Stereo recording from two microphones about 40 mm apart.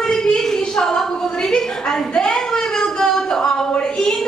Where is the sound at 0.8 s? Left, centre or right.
Centre.